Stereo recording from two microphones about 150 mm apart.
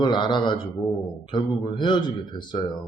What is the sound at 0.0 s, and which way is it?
Speech, 30° left (ahead or behind).